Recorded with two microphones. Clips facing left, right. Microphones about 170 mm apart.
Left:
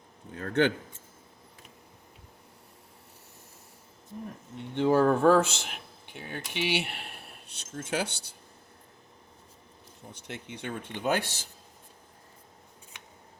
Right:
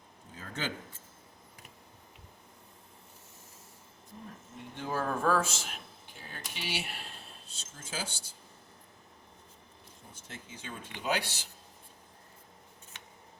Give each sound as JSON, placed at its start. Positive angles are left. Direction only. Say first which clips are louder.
{"t": 0.3, "sound": "speech", "louder": "left 13 dB", "side_deg": 65}
{"t": 4.5, "sound": "speech", "louder": "left 12 dB", "side_deg": 70}
{"t": 10.1, "sound": "speech", "louder": "left 8 dB", "side_deg": 70}